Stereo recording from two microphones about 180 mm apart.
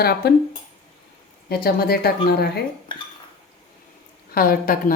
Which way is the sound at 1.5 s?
60° left (ahead or behind).